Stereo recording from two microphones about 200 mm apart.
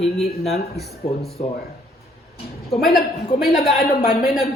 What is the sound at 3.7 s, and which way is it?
Speech, 45° left (ahead or behind).